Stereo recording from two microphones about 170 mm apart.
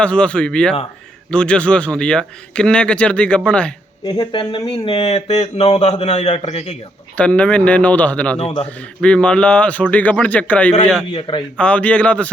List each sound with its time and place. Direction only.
0.0 s a man's voice: 5° left (ahead or behind)
4.0 s speech: 30° left (ahead or behind)
7.2 s speech: 5° left (ahead or behind)
8.4 s speech: 30° left (ahead or behind)
9.0 s speech: 5° left (ahead or behind)
11.1 s a man's voice: 30° left (ahead or behind)
11.5 s speech: 5° left (ahead or behind)